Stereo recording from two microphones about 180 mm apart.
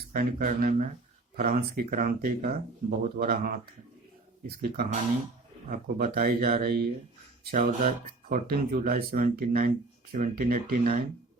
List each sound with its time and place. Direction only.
0.1 s speech: 50° right (ahead or behind)